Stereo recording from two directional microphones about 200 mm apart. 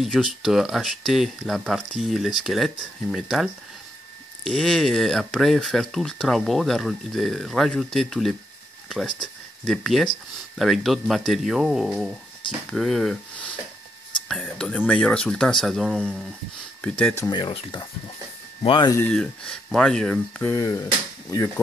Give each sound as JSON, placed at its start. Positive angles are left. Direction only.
{"t": 0.0, "sound": "speech", "side_deg": 0}
{"t": 4.5, "sound": "speech", "side_deg": 0}
{"t": 19.0, "sound": "speech", "side_deg": 5}